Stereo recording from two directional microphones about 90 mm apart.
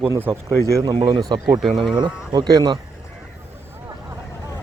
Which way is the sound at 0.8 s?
65° right (ahead or behind).